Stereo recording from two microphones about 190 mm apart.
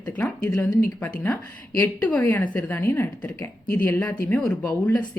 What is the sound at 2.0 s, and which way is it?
A woman's voice, 5° left (ahead or behind).